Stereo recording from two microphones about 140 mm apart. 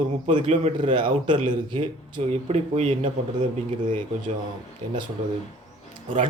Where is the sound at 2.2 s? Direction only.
45° right (ahead or behind).